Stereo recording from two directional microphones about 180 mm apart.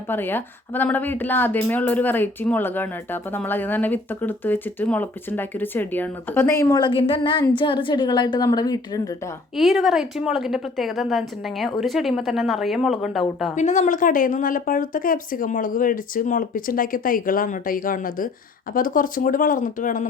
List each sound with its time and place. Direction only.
0.1 s a woman's voice: 10° left (ahead or behind)
9.6 s a woman's voice: centre (ahead or behind)
13.6 s speech: 40° left (ahead or behind)